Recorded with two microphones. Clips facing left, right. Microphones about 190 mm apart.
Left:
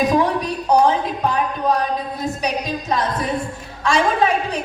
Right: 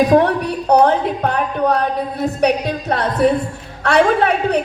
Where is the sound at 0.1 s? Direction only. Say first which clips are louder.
Right 5 dB; 65° right (ahead or behind).